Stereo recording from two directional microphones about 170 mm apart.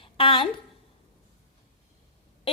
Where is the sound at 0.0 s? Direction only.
30° left (ahead or behind).